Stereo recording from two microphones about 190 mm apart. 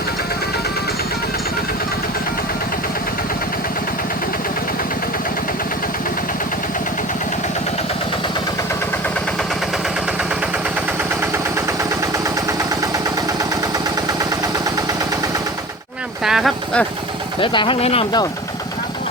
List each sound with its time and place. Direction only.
12.1 s vehicle: 15° right (ahead or behind)
16.2 s a sound: centre (ahead or behind)
17.4 s speech: 25° left (ahead or behind)